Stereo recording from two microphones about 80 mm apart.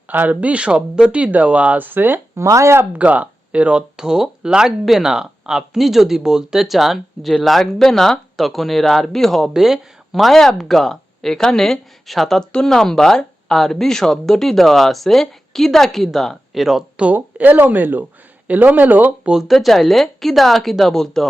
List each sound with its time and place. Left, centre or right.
0.1 s speech: right
2.3 s speech: right
3.0 s speech: centre
17.0 s speech: centre
19.3 s speech: centre